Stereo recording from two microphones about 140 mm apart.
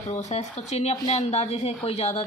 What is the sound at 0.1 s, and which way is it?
Speech, 50° left (ahead or behind).